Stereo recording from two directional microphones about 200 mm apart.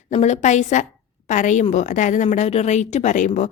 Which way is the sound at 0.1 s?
35° left (ahead or behind).